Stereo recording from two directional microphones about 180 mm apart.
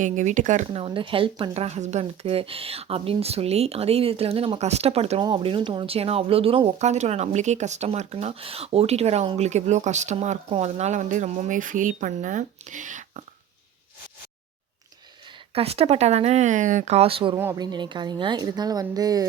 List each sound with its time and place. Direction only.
0.0 s speech: 45° right (ahead or behind)
15.5 s speech: 35° right (ahead or behind)
17.3 s a woman's voice: 15° right (ahead or behind)